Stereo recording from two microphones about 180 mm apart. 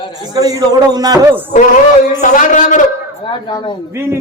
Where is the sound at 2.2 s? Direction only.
45° left (ahead or behind).